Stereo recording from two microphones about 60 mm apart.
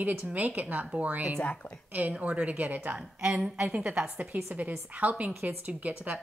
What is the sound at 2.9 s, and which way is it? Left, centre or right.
A woman's voice, centre.